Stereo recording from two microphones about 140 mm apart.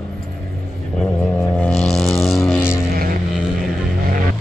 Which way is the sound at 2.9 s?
90° right.